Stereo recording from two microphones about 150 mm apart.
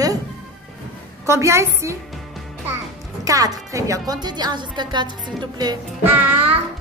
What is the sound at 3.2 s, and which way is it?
Speech, 20° right (ahead or behind).